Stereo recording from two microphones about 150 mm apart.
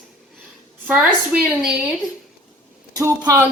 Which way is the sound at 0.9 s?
10° right (ahead or behind).